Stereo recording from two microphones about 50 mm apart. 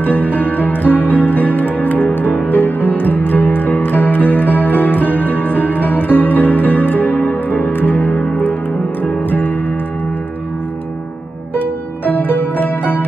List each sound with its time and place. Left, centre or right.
0.0 s music: left
11.5 s pizzicato: left